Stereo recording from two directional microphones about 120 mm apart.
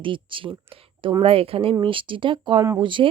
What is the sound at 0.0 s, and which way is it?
Speech, 45° right (ahead or behind).